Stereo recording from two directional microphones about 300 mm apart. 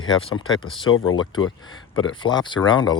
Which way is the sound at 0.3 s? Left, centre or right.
Left.